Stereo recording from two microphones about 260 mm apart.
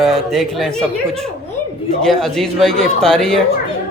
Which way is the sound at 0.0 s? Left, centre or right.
Centre.